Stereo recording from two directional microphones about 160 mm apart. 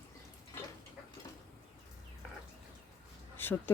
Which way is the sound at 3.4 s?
15° left (ahead or behind).